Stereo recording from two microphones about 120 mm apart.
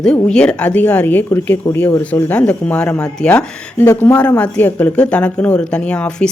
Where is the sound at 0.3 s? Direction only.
10° left (ahead or behind).